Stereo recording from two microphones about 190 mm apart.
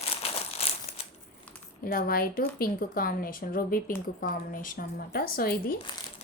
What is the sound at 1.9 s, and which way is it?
Speech, 50° left (ahead or behind).